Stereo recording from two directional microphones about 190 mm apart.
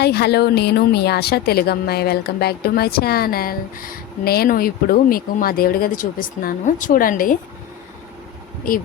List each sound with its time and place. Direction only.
0.0 s a woman's voice: 55° left (ahead or behind)